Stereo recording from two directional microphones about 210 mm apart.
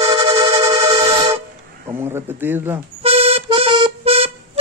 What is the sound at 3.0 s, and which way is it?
Music, 30° right (ahead or behind).